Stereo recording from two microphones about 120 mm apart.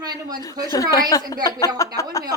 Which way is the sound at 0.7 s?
30° left (ahead or behind).